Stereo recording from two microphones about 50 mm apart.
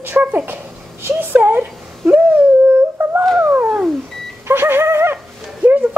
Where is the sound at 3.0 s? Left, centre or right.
Right.